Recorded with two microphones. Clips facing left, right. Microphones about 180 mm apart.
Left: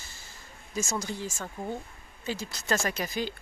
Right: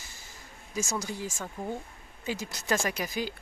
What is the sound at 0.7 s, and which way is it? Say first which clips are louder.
Speech: left 1 dB; 10° right (ahead or behind).